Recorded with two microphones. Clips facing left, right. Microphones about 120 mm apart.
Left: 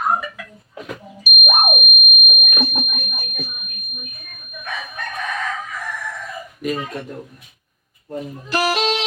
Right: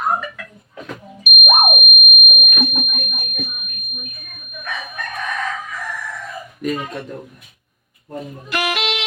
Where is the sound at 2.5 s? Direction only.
35° left (ahead or behind).